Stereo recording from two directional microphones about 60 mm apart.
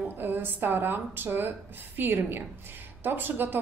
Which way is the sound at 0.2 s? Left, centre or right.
Right.